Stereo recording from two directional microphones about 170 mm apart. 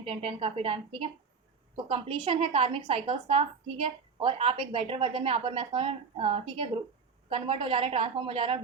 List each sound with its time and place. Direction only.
0.0 s a woman's voice: 30° right (ahead or behind)